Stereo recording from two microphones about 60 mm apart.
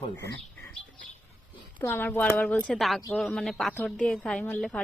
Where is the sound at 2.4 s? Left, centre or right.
Left.